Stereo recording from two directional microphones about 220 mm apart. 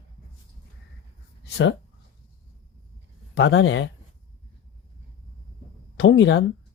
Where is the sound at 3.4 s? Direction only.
55° left (ahead or behind).